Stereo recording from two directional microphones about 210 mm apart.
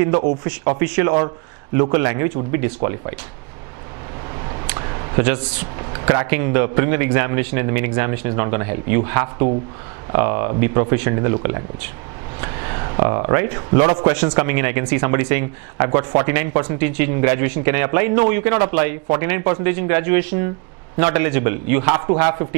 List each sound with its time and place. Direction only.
0.0 s speech: 15° right (ahead or behind)
4.6 s a sound: 20° right (ahead or behind)
5.9 s speech: 20° right (ahead or behind)
12.4 s speech: 15° right (ahead or behind)